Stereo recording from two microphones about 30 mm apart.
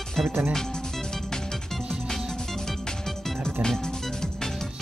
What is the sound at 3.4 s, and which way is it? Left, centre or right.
Music, left.